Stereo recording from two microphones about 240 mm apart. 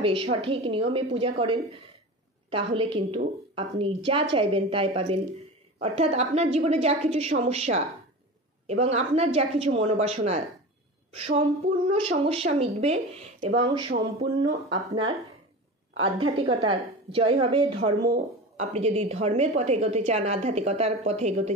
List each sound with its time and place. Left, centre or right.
0.0 s a woman's voice: right
16.2 s a woman's voice: right